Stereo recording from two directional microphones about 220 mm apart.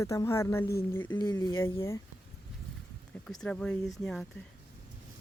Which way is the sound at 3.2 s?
5° left (ahead or behind).